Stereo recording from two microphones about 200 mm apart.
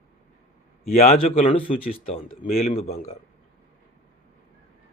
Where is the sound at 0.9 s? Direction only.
30° left (ahead or behind).